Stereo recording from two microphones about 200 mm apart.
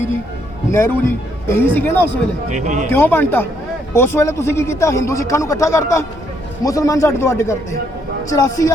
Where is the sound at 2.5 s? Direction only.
35° right (ahead or behind).